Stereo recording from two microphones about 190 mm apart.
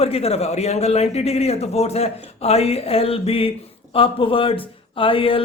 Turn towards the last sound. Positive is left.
turn(degrees=30)  # may be behind; listen again after turning